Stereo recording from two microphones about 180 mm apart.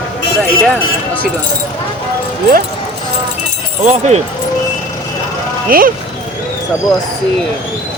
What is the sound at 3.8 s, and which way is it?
Speech, 40° right (ahead or behind).